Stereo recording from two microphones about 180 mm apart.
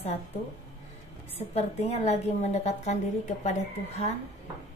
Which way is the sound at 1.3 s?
35° left (ahead or behind).